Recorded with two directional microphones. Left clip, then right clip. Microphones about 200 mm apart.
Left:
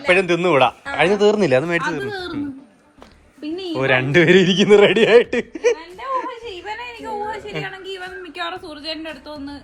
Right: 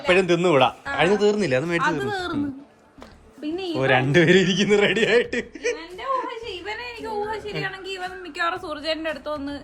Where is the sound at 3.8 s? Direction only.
10° right (ahead or behind).